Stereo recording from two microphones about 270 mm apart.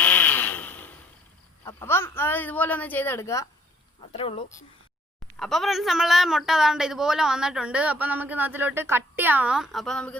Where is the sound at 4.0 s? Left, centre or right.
Centre.